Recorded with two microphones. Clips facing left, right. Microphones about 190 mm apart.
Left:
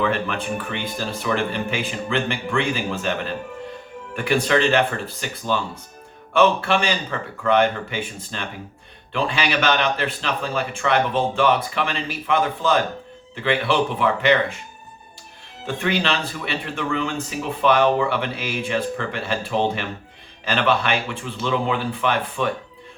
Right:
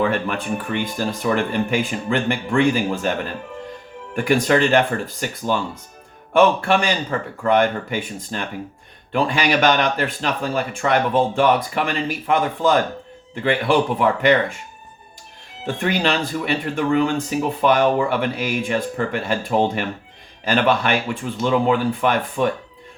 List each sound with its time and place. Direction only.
0.0 s speech: 45° right (ahead or behind)
15.6 s speech: 45° right (ahead or behind)